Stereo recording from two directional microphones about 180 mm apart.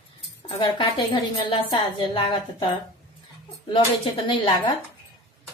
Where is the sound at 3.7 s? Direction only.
25° left (ahead or behind).